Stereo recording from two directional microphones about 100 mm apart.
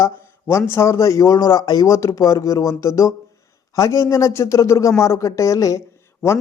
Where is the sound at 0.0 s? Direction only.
25° left (ahead or behind).